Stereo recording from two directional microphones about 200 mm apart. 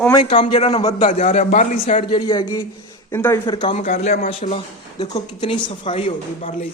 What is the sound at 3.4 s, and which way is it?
Speech, 25° left (ahead or behind).